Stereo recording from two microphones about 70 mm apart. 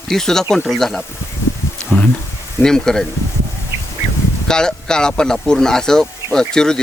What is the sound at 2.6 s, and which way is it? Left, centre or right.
Speech, centre.